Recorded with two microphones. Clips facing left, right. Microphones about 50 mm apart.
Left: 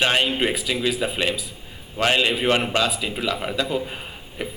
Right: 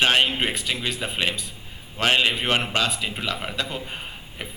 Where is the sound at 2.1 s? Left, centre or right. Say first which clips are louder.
Left 1 dB; centre.